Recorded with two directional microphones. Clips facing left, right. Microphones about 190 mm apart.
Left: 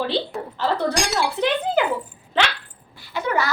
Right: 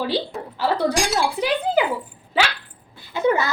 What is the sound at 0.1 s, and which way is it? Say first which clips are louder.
Speech: even; 10° right (ahead or behind).